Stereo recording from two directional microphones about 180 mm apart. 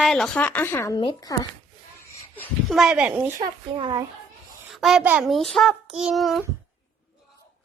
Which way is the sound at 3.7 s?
25° right (ahead or behind).